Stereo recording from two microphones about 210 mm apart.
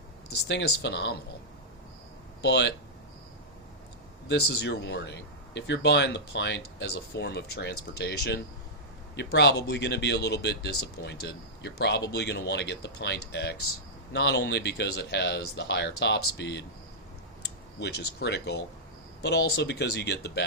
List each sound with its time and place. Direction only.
0.3 s speech: 55° left (ahead or behind)
2.4 s speech: 55° left (ahead or behind)
4.3 s speech: 50° left (ahead or behind)
17.7 s speech: 50° left (ahead or behind)